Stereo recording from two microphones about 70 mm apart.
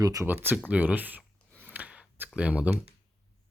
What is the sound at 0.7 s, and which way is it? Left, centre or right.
Speech, right.